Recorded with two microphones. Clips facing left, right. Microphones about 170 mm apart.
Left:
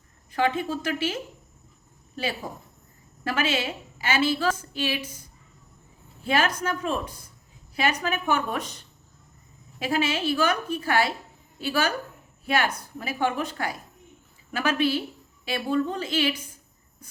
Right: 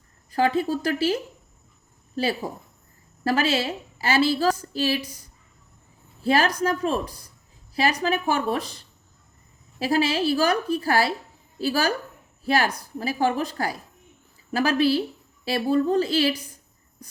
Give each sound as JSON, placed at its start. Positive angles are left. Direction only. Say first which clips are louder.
{"t": 0.3, "sound": "a woman's voice", "louder": "right 3 dB", "side_deg": -35}
{"t": 3.2, "sound": "a woman's voice", "louder": "right 4 dB", "side_deg": -35}
{"t": 6.2, "sound": "a woman's voice", "louder": "right 4 dB", "side_deg": -35}